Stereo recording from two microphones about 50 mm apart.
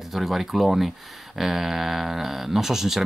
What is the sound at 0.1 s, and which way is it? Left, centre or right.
Speech, centre.